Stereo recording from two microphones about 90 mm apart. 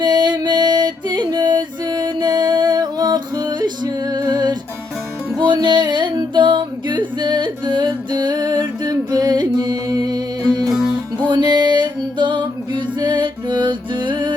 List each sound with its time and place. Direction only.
0.0 s music: 55° right (ahead or behind)
10.6 s music: centre (ahead or behind)
11.3 s music: 55° right (ahead or behind)